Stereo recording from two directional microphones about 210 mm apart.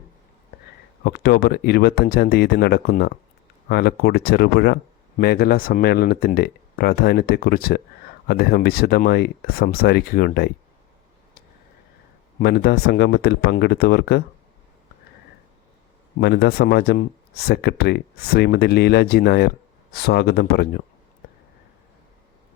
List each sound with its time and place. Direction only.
1.0 s speech: 50° left (ahead or behind)
12.4 s speech: 50° left (ahead or behind)
16.2 s speech: 50° left (ahead or behind)